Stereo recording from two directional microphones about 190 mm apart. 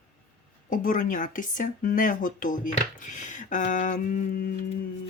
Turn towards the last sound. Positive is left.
turn(degrees=50)  # may be behind; listen again after turning